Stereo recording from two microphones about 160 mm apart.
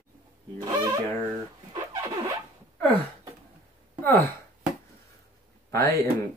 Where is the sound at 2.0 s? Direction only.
20° right (ahead or behind).